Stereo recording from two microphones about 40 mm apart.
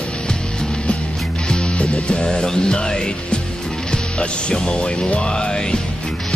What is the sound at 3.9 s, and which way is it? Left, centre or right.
Speech, left.